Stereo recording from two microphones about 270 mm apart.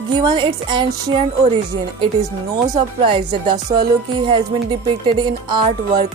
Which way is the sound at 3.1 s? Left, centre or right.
Centre.